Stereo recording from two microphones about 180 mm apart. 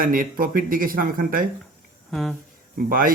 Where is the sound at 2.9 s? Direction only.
50° right (ahead or behind).